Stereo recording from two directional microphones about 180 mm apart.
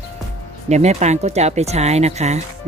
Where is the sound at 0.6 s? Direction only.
40° right (ahead or behind).